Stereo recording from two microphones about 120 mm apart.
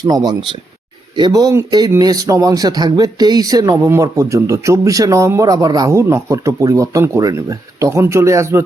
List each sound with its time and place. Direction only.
0.0 s speech: 35° right (ahead or behind)